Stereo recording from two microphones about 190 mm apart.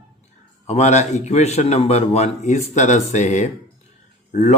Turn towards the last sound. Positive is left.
turn(degrees=35)  # may be behind; listen again after turning